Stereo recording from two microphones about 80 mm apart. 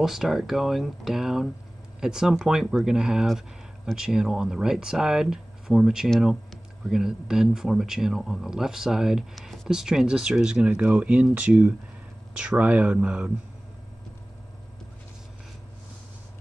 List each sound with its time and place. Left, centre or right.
0.0 s speech: centre